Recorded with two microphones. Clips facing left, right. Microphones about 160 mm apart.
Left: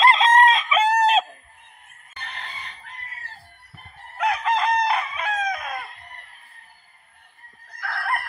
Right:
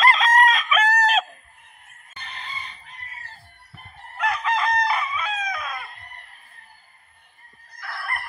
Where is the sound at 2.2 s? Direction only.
60° left (ahead or behind).